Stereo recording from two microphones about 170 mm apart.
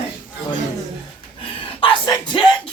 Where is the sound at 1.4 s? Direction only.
30° left (ahead or behind).